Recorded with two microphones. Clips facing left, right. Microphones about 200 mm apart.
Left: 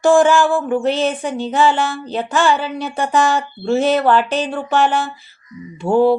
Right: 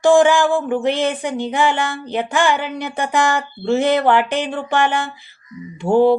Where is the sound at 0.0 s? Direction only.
15° right (ahead or behind).